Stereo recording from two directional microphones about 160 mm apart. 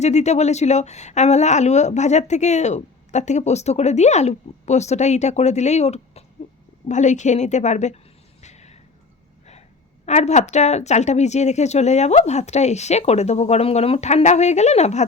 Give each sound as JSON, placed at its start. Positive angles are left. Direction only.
{"t": 0.0, "sound": "speech", "side_deg": 45}
{"t": 8.4, "sound": "a sound", "side_deg": 45}
{"t": 10.1, "sound": "speech", "side_deg": 45}